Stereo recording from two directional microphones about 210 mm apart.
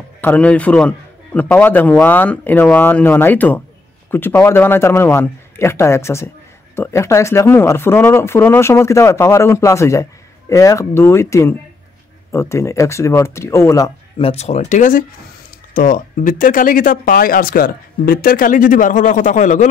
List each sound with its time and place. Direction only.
0.2 s a man's voice: 5° left (ahead or behind); by 19.7 s 35° left (ahead or behind)